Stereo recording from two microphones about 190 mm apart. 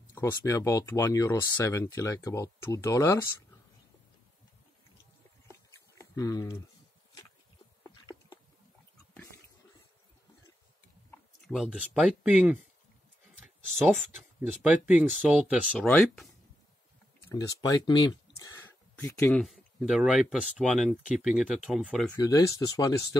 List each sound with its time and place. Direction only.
0.1 s speech: 15° left (ahead or behind)
5.5 s a sound: 15° left (ahead or behind)
7.8 s a sound: 20° left (ahead or behind)
11.4 s speech: centre (ahead or behind)
14.4 s speech: 10° right (ahead or behind)
17.3 s speech: 20° left (ahead or behind)
19.4 s speech: centre (ahead or behind)
22.1 s speech: 20° left (ahead or behind)